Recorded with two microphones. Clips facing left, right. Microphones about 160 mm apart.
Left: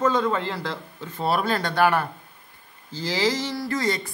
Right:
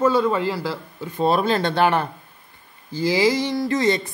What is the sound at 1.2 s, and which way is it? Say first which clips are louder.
Speech: right 5 dB; 20° right (ahead or behind).